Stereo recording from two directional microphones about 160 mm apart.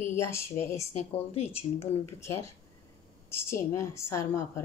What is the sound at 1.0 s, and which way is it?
Speech, 40° left (ahead or behind).